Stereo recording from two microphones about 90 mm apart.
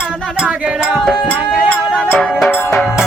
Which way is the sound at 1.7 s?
15° left (ahead or behind).